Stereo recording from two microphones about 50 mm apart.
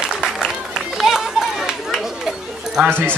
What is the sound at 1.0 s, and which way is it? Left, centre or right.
Run, centre.